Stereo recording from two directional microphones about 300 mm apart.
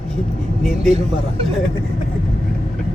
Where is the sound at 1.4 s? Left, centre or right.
Centre.